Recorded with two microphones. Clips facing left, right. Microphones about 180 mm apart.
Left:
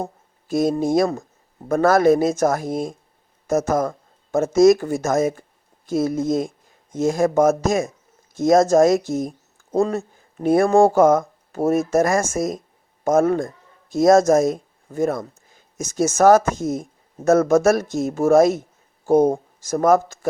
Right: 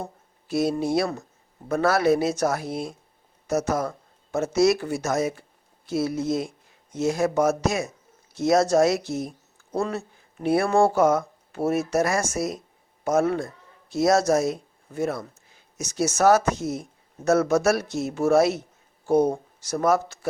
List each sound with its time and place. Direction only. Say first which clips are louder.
0.0 s speech: left 6 dB; 45° left (ahead or behind)